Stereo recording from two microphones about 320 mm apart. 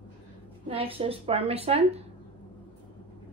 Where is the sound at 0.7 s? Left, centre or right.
Centre.